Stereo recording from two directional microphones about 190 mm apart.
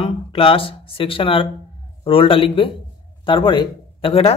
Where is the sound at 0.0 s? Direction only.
30° left (ahead or behind).